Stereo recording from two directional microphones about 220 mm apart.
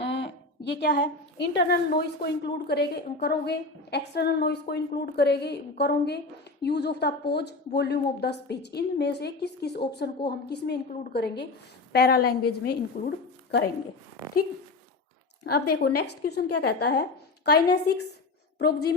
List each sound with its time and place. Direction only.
0.0 s a woman's voice: 50° left (ahead or behind)
16.0 s a woman's voice: 45° left (ahead or behind)